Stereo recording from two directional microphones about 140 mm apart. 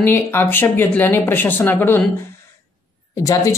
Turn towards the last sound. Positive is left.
turn(degrees=25)  # may be behind; listen again after turning